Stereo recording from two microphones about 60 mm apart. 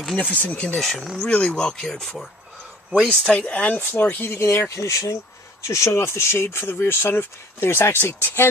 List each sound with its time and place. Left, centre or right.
0.2 s speech: left
0.7 s speech: centre
1.1 s speech: centre
3.1 s speech: centre
4.1 s speech: left